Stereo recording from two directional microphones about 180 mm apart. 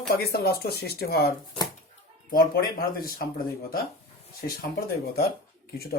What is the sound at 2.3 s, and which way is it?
Speech, 55° left (ahead or behind).